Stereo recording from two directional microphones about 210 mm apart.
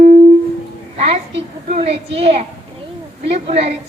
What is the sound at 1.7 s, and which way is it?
Speech, 30° right (ahead or behind).